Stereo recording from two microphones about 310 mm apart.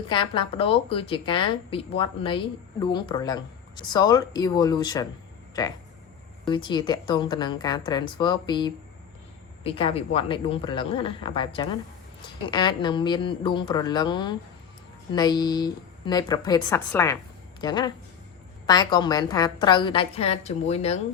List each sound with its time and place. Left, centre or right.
0.1 s speech: centre